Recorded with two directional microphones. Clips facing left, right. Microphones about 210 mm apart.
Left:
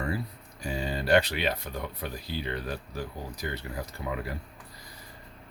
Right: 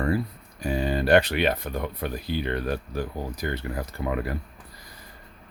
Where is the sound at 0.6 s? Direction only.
55° right (ahead or behind).